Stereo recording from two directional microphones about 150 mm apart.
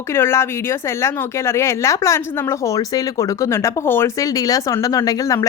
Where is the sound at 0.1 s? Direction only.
15° left (ahead or behind).